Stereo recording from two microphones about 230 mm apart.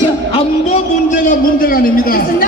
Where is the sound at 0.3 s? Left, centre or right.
Left.